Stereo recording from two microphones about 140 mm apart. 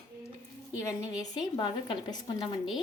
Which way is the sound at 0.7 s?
20° left (ahead or behind).